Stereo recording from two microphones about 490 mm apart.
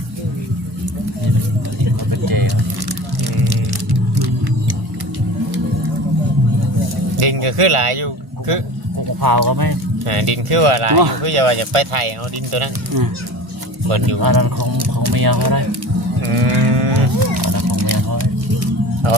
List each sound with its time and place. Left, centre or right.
2.0 s vehicle: right
3.4 s music: right
7.2 s a sound: right
9.2 s speech: right
10.1 s speech: right
10.9 s speech: right
11.2 s speech: right
13.8 s speech: right
14.2 s speech: right
16.4 s livestock: right
16.9 s music: right